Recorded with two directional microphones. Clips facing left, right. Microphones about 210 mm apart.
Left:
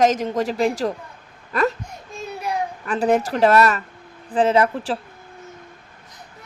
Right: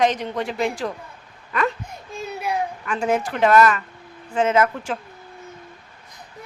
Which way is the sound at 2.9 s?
35° left (ahead or behind).